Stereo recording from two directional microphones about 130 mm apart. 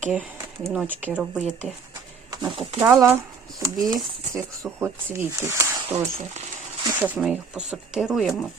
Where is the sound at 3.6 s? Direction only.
25° right (ahead or behind).